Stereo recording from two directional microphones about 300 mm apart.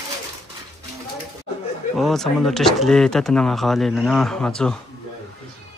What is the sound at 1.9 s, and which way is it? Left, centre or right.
Speech, centre.